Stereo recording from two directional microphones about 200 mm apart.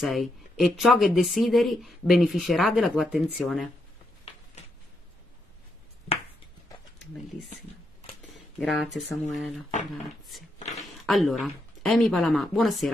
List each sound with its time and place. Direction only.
0.0 s speech: centre (ahead or behind)
8.5 s speech: centre (ahead or behind)
10.6 s a sound: 35° left (ahead or behind)
11.1 s speech: centre (ahead or behind)